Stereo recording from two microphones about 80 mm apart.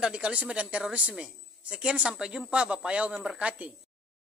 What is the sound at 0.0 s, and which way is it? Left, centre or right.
Speech, centre.